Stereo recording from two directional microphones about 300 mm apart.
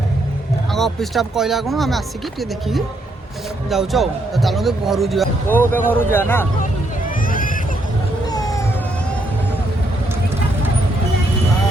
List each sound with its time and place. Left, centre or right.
0.7 s speech: centre
3.7 s speech: centre
7.3 s a sound: left
8.3 s cat: centre